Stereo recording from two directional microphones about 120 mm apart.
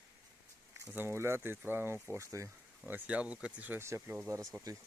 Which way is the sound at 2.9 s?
15° right (ahead or behind).